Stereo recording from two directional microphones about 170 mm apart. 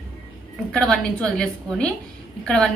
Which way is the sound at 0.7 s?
5° left (ahead or behind).